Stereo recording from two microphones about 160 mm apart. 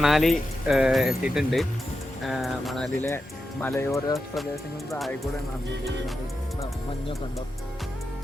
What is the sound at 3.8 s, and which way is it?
Speech, 15° left (ahead or behind).